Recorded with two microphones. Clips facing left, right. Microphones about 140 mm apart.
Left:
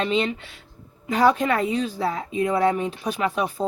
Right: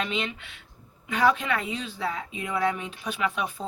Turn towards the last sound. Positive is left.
turn(degrees=35)  # may be behind; listen again after turning